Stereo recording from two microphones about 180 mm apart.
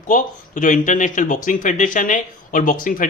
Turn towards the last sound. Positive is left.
turn(degrees=50)  # may be behind; listen again after turning